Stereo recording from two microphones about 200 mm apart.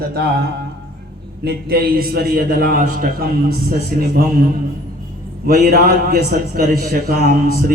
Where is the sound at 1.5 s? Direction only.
50° right (ahead or behind).